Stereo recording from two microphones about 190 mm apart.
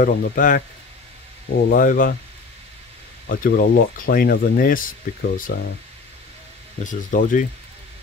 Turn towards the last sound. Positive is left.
turn(degrees=45)  # may be behind; listen again after turning